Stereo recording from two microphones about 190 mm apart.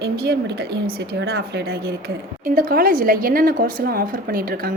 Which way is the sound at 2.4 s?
50° right (ahead or behind).